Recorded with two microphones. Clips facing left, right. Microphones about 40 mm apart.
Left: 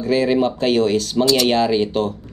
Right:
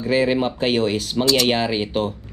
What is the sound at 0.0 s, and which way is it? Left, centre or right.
Speech, centre.